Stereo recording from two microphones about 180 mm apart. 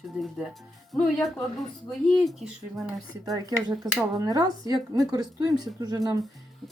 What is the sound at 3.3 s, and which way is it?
Speech, 20° right (ahead or behind).